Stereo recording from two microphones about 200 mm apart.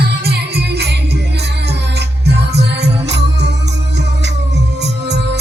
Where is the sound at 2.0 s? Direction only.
60° right (ahead or behind).